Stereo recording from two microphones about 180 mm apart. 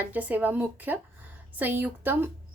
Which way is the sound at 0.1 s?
10° right (ahead or behind).